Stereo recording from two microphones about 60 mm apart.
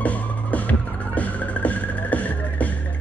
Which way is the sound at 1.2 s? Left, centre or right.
Left.